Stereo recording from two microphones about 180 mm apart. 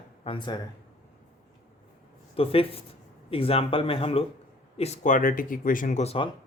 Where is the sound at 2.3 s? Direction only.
30° left (ahead or behind).